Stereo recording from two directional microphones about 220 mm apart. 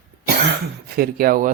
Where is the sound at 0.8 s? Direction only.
45° right (ahead or behind).